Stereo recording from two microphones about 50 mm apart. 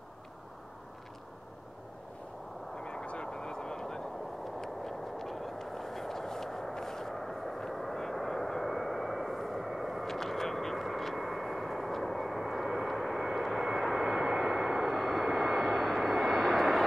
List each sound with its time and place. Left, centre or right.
2.8 s vehicle: left; by 16.8 s centre